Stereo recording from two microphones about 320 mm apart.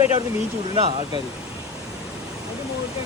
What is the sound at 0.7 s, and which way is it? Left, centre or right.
Speech, centre.